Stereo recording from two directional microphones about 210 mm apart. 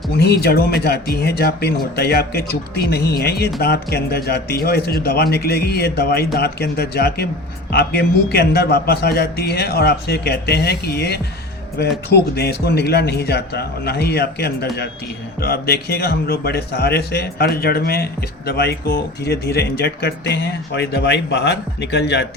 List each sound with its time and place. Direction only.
0.2 s speech: 50° left (ahead or behind)